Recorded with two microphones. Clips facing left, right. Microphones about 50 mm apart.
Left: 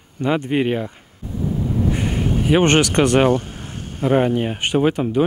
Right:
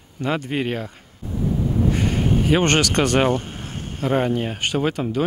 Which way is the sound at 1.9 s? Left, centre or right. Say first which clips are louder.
Even; centre.